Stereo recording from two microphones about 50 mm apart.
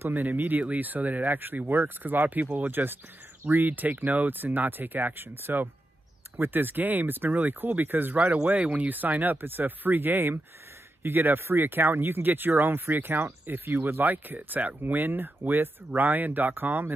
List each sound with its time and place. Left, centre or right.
0.0 s speech: right